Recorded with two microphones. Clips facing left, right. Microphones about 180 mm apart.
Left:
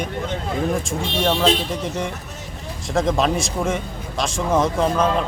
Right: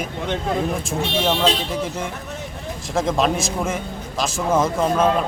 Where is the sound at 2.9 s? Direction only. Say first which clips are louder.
Left 1 dB; centre (ahead or behind).